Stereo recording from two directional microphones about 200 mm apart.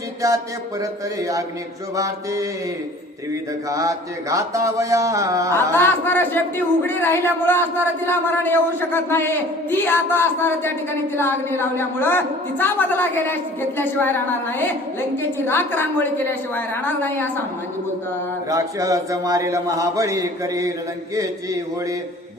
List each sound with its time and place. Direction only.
0.2 s a man's voice: 15° right (ahead or behind)
3.7 s a man's voice: 15° right (ahead or behind)
5.5 s a man's voice: 10° left (ahead or behind)
18.4 s a man's voice: 15° right (ahead or behind)